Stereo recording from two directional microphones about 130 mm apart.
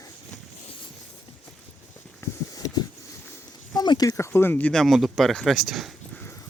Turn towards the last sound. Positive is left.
turn(degrees=0)  # may be behind; listen again after turning